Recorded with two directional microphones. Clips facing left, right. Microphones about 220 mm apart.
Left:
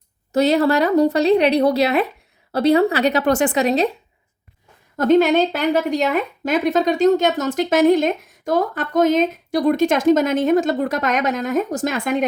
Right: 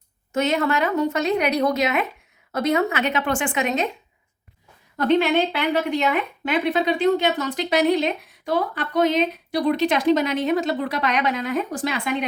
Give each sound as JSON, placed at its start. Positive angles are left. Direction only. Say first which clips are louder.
{"t": 0.3, "sound": "a woman's voice", "louder": "left 6 dB", "side_deg": 35}
{"t": 4.9, "sound": "a woman's voice", "louder": "left 4 dB", "side_deg": 45}